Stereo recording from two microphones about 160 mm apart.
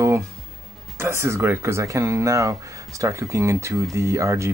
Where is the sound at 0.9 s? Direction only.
15° right (ahead or behind).